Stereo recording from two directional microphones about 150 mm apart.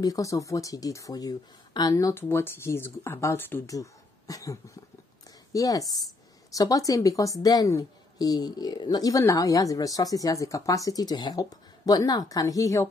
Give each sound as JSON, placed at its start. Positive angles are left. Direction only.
{"t": 0.0, "sound": "a woman's voice", "side_deg": 20}